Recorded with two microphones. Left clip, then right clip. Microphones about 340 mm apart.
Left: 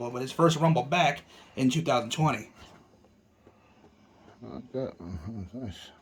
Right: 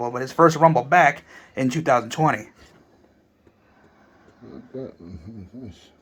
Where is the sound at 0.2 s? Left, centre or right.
Centre.